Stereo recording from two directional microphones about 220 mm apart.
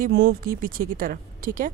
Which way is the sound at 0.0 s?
45° right (ahead or behind).